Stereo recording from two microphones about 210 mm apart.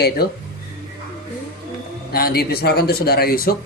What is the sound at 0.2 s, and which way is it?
Speech, 50° left (ahead or behind).